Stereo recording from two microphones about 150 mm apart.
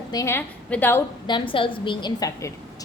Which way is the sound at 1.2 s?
35° left (ahead or behind).